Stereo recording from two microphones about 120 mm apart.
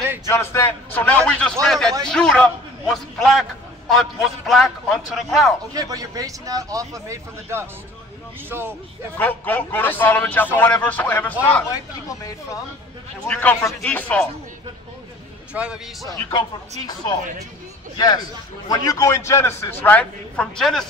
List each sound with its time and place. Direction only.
0.3 s a man's voice: 25° left (ahead or behind); by 5.5 s centre (ahead or behind)
5.7 s speech: 30° right (ahead or behind)
9.2 s a man's voice: 15° left (ahead or behind)
13.3 s a man's voice: 15° left (ahead or behind)
15.5 s speech: 10° right (ahead or behind)
16.1 s speech: 40° left (ahead or behind)
17.9 s a man's voice: 35° left (ahead or behind); by 20.8 s 5° left (ahead or behind)